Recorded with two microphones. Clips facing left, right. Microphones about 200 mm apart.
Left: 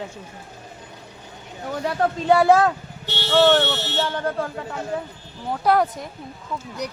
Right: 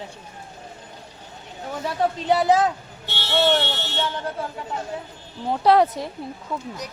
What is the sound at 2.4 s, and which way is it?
Speech, 55° left (ahead or behind).